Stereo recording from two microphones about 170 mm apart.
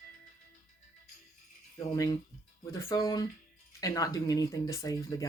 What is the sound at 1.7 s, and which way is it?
Speech, 20° left (ahead or behind).